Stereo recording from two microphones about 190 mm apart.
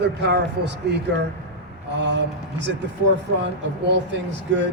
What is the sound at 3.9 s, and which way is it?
Speech, 70° right (ahead or behind).